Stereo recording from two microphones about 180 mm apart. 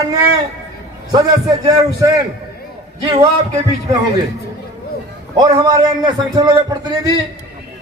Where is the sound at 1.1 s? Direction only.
20° right (ahead or behind).